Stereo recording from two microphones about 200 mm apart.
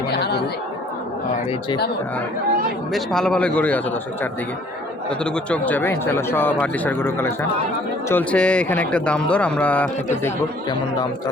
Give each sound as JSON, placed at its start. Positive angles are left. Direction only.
{"t": 0.1, "sound": "chatter", "side_deg": 55}
{"t": 2.9, "sound": "a man's voice", "side_deg": 0}